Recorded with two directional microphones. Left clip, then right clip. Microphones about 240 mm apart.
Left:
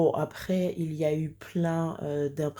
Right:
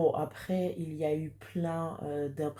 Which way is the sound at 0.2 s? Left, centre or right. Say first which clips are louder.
Left 4 dB; left.